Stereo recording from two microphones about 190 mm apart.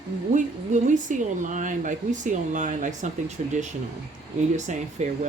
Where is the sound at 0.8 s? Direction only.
40° right (ahead or behind).